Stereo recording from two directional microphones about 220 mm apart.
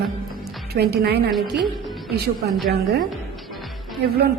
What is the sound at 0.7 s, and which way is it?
Speech, 45° right (ahead or behind).